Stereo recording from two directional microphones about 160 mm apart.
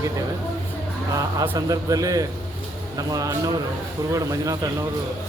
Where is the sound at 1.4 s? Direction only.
20° right (ahead or behind).